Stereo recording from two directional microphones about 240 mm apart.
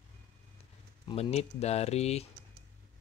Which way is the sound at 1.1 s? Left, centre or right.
Left.